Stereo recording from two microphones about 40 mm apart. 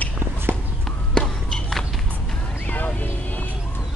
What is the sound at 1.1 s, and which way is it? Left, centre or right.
Basketball bounce, centre.